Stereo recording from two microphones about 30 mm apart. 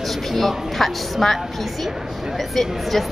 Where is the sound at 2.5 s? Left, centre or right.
Centre.